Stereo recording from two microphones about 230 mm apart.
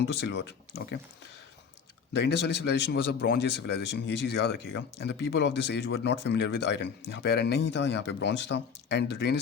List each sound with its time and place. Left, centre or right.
0.0 s speech: left
2.1 s speech: left